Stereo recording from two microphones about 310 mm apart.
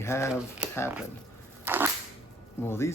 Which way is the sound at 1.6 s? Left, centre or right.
Centre.